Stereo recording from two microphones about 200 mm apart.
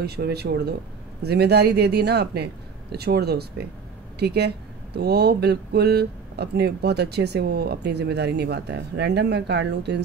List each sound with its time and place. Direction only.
0.0 s speech: 55° right (ahead or behind)